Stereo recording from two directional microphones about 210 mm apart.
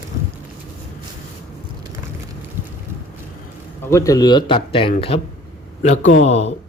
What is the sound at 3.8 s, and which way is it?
Speech, 15° left (ahead or behind).